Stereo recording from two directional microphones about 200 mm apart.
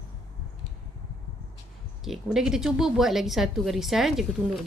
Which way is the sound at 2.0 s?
Centre (ahead or behind).